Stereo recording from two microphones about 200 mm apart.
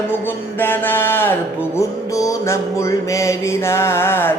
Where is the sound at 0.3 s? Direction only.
10° left (ahead or behind).